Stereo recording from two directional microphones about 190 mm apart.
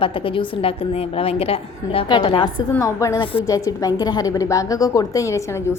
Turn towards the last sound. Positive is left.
turn(degrees=15)  # may be behind; listen again after turning